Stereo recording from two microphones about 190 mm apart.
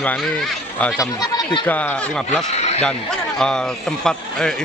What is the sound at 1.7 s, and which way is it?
Speech, 10° left (ahead or behind).